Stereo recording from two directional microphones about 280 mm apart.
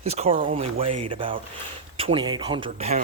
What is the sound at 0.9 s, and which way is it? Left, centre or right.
Speech, right.